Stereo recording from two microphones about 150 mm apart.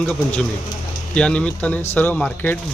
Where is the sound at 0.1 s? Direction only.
10° left (ahead or behind).